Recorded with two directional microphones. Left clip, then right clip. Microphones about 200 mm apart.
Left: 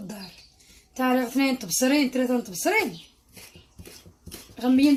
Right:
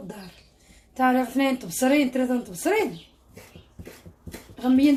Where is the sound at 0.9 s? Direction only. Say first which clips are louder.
Right 2 dB; 35° left (ahead or behind).